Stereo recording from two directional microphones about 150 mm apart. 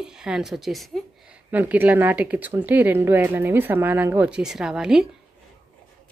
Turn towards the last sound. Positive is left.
turn(degrees=-5)  # may be behind; listen again after turning